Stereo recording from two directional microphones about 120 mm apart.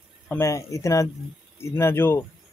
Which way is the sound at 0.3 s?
25° left (ahead or behind).